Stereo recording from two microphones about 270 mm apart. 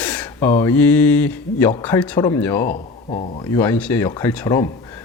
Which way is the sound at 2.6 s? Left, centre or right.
Left.